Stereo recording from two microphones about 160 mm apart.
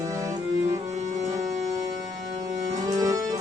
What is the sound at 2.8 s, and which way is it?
Music, 20° right (ahead or behind).